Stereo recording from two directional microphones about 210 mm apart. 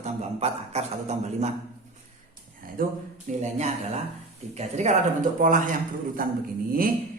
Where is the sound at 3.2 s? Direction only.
35° right (ahead or behind).